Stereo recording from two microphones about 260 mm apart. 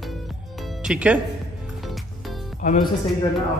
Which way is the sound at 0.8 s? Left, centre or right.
Centre.